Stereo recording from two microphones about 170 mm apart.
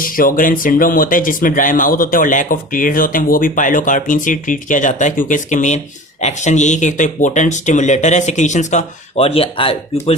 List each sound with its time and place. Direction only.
0.0 s speech: 55° left (ahead or behind); by 10.2 s 35° left (ahead or behind)